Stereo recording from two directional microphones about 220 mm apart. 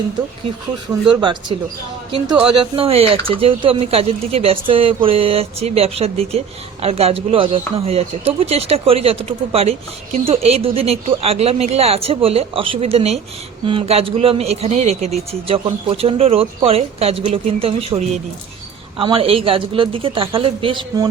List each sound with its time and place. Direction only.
1.1 s speech: 20° right (ahead or behind)